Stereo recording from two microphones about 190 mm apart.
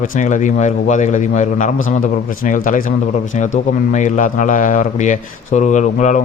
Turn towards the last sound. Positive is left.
turn(degrees=40)  # may be behind; listen again after turning